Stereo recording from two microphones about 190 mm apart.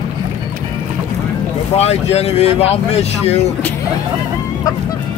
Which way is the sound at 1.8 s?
35° left (ahead or behind).